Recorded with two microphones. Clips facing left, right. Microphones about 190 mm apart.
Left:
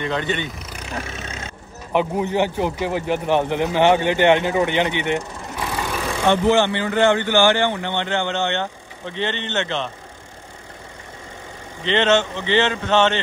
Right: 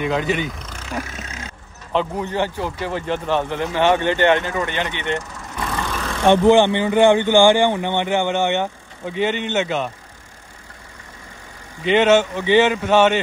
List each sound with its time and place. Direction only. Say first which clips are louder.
0.0 s speech: right 3 dB; 5° right (ahead or behind)
0.6 s vehicle: left 1 dB; 10° left (ahead or behind)
1.0 s vehicle: left 2 dB; 25° left (ahead or behind)
1.9 s speech: left 2 dB; 15° left (ahead or behind)
5.7 s vehicle: left 1 dB; 10° left (ahead or behind)
6.2 s speech: right 4 dB; 15° right (ahead or behind)
11.8 s speech: right 3 dB; 10° right (ahead or behind)